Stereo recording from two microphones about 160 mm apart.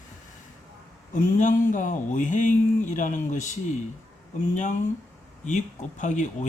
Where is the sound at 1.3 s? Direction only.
55° left (ahead or behind).